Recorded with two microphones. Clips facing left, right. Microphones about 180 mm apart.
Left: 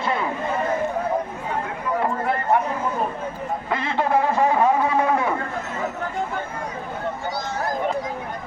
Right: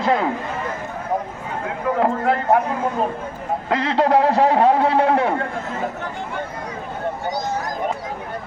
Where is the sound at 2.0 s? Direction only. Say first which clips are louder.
Right 6 dB; 90° right.